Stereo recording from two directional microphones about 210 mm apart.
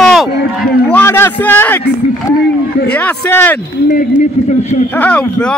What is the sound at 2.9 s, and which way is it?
Speech, 5° left (ahead or behind).